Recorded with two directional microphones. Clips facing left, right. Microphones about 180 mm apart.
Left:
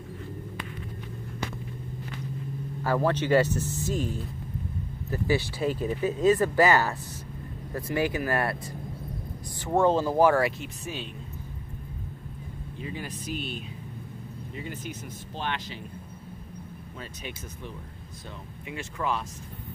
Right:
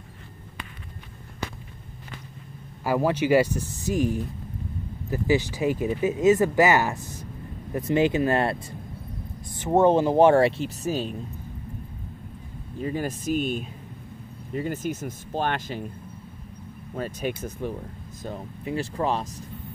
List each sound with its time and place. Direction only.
2.8 s speech: 10° right (ahead or behind)
9.6 s speech: 20° right (ahead or behind); by 11.1 s 40° right (ahead or behind)
12.7 s speech: 45° right (ahead or behind)
16.9 s speech: 50° right (ahead or behind)
18.2 s speech: 40° right (ahead or behind)